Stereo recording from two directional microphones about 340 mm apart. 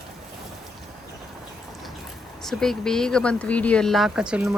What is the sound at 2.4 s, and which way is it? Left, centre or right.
Speech, centre.